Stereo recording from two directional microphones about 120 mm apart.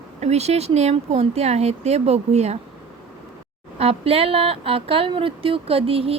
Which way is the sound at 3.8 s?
55° right (ahead or behind).